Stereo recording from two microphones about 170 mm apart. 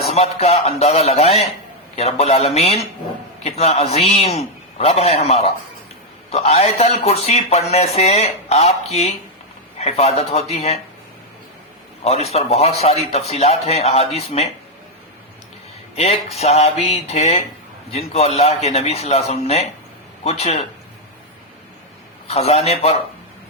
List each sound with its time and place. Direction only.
0.1 s speech: 40° left (ahead or behind)
12.0 s speech: 40° left (ahead or behind)
16.0 s speech: 40° left (ahead or behind)
22.3 s speech: 40° left (ahead or behind)